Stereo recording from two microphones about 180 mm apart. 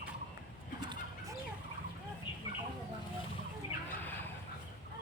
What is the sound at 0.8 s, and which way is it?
Bird, 25° right (ahead or behind).